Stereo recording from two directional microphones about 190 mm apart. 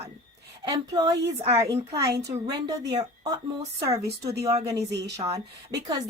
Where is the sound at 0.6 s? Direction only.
20° right (ahead or behind).